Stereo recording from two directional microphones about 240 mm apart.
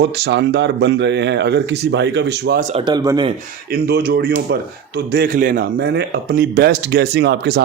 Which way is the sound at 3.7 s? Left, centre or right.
Right.